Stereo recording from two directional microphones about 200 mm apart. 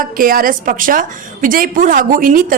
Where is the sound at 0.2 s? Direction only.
45° right (ahead or behind).